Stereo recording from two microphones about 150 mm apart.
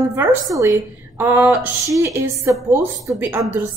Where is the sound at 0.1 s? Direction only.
15° right (ahead or behind).